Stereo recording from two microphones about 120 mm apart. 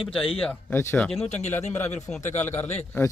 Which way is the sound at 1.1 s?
65° left (ahead or behind).